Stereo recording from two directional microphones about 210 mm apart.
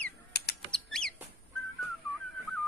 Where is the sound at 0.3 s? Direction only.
50° left (ahead or behind).